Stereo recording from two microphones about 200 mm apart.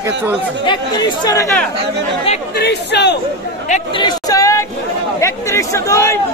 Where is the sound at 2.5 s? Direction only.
55° left (ahead or behind).